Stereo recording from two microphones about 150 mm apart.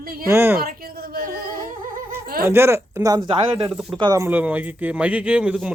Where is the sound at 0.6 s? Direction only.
80° right.